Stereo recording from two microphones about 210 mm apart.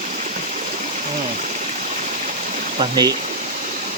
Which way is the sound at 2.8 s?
20° right (ahead or behind).